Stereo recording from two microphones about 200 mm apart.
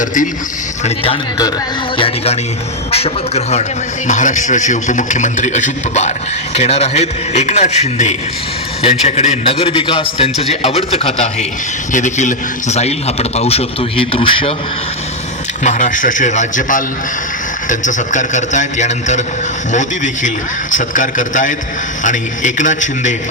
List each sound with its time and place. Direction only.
0.0 s a man's voice: 40° left (ahead or behind)
2.0 s a man's voice: 30° left (ahead or behind)
15.6 s a man's voice: 40° left (ahead or behind)
20.2 s a man's voice: 40° left (ahead or behind)